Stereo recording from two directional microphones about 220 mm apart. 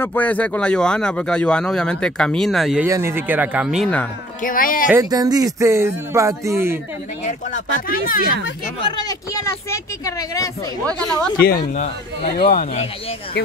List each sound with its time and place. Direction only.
0.0 s speech: 10° left (ahead or behind)
4.4 s speech: 40° left (ahead or behind)
4.9 s speech: 15° right (ahead or behind)
7.2 s speech: 35° left (ahead or behind)
8.8 s speech: 20° left (ahead or behind)
11.4 s speech: 35° left (ahead or behind)